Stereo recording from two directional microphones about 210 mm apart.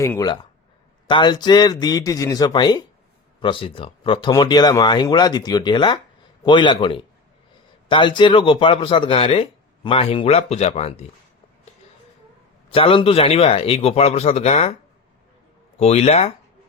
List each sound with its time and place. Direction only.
0.0 s speech: 15° left (ahead or behind)
12.7 s speech: 25° left (ahead or behind)
15.8 s speech: 30° left (ahead or behind)